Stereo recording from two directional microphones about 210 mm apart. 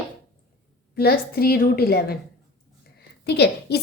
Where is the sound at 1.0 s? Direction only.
45° left (ahead or behind).